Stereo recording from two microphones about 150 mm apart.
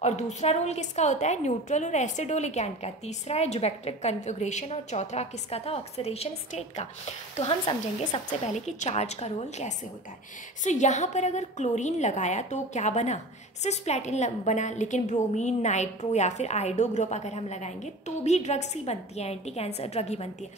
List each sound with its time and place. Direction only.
0.0 s a woman's voice: 50° left (ahead or behind)
8.3 s a woman's voice: 50° left (ahead or behind)